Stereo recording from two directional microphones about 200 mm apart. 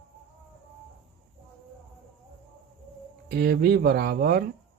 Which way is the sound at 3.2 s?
50° right (ahead or behind).